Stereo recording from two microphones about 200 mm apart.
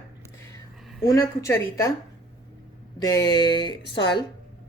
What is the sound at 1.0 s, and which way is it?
Speech, 15° left (ahead or behind).